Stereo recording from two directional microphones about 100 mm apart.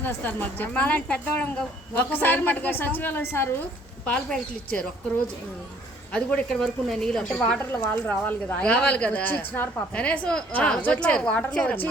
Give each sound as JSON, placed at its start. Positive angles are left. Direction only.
{"t": 0.0, "sound": "a woman's voice", "side_deg": 20}
{"t": 6.1, "sound": "a woman's voice", "side_deg": 5}
{"t": 7.6, "sound": "speech", "side_deg": 20}